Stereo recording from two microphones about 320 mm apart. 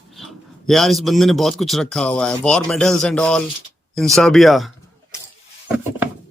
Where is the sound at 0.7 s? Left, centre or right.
Centre.